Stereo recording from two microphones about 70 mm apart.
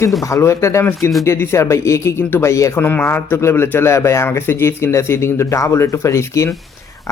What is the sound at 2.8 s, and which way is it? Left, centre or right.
Speech, left.